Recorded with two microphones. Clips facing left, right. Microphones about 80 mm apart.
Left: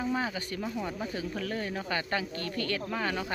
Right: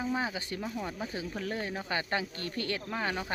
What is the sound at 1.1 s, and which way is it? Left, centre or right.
Speech, centre.